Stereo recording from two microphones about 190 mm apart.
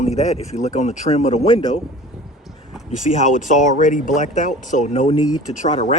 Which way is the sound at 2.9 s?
40° left (ahead or behind).